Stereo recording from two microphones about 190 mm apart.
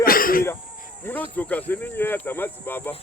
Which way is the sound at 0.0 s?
50° left (ahead or behind).